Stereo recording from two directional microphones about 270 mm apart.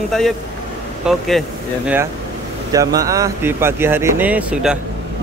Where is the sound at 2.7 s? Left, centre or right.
Centre.